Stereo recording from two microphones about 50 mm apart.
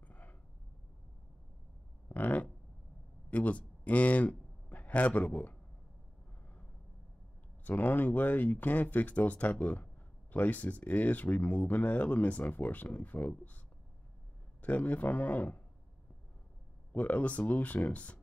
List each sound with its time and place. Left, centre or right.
0.1 s a sound: left
2.0 s a sound: left
3.3 s a man's voice: left
7.6 s speech: left
14.6 s speech: left
16.9 s speech: left